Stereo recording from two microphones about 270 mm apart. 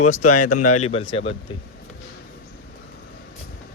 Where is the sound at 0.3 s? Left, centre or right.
Left.